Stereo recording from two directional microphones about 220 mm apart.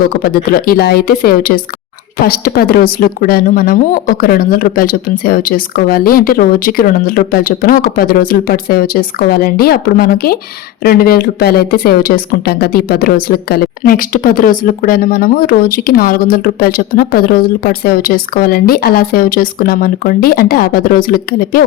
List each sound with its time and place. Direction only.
0.1 s speech: 45° left (ahead or behind)